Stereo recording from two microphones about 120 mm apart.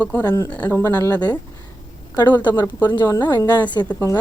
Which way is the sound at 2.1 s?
35° left (ahead or behind).